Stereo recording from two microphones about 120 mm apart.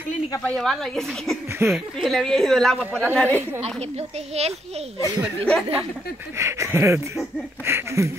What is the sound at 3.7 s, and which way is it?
Speech, 65° right (ahead or behind).